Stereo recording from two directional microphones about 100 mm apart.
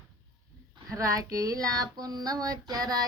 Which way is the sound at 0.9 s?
35° right (ahead or behind).